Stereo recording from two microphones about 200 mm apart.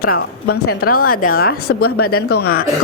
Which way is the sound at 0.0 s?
50° left (ahead or behind).